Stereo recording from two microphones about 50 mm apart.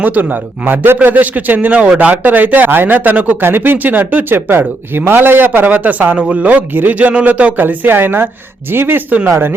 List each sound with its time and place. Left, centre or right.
0.0 s a man's voice: right
6.1 s a man's voice: right
7.6 s a woman's voice: right